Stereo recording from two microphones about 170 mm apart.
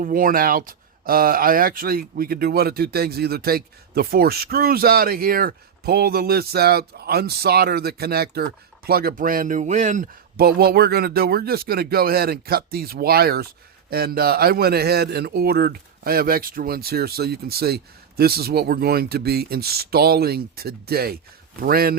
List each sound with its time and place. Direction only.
0.0 s speech: 55° right (ahead or behind)